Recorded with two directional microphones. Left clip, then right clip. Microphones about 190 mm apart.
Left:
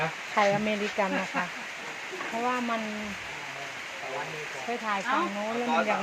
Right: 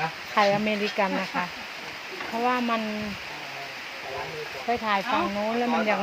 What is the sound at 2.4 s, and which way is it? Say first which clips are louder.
Speech: right 5 dB; 20° right (ahead or behind).